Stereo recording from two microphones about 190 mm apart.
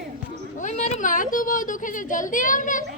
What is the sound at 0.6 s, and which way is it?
A woman's voice, 40° left (ahead or behind).